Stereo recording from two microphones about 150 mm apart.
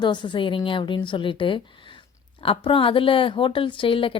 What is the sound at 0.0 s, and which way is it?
A woman's voice, 30° left (ahead or behind).